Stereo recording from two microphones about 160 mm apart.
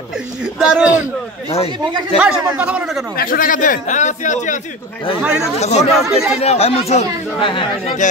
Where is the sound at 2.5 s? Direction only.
5° right (ahead or behind).